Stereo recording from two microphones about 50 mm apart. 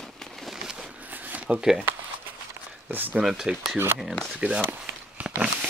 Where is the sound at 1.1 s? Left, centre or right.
Right.